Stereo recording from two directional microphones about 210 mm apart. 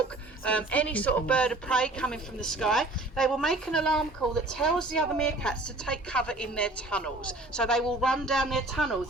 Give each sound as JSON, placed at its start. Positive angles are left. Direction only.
{"t": 0.4, "sound": "a woman's voice", "side_deg": 5}